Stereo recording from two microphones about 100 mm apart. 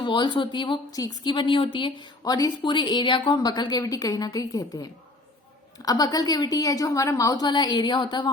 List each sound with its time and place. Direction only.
0.0 s a woman's voice: 50° left (ahead or behind)
0.9 s a woman's voice: 40° left (ahead or behind)